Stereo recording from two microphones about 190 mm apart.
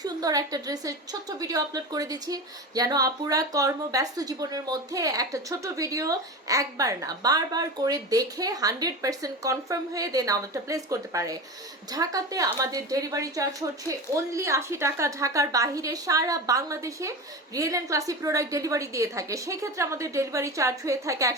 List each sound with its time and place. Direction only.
0.0 s a woman's voice: 20° right (ahead or behind)